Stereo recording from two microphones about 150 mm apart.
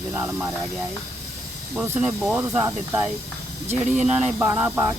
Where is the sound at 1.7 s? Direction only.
15° right (ahead or behind).